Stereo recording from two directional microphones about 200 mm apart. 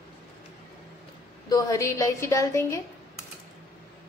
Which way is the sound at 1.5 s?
15° left (ahead or behind).